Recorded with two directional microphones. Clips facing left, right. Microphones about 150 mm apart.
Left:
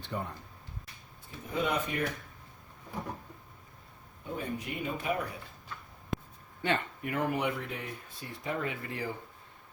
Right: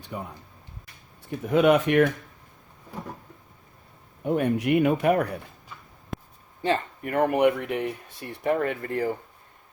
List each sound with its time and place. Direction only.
0.0 s speech: 10° right (ahead or behind)
1.3 s speech: 80° right
4.2 s speech: 70° right (ahead or behind)
6.6 s speech: 35° right (ahead or behind)
7.0 s speech: 55° right (ahead or behind)